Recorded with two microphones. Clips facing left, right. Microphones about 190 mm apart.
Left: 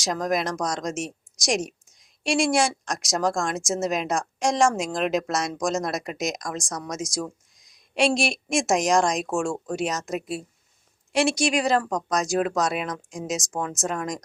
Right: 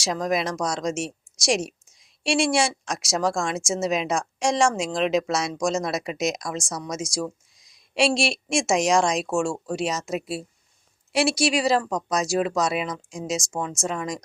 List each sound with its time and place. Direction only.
0.0 s a woman's voice: centre (ahead or behind)